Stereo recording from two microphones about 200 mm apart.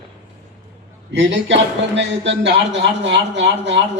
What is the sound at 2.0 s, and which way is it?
A man's voice, 60° right (ahead or behind).